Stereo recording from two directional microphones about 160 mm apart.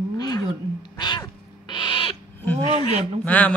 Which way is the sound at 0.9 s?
30° left (ahead or behind).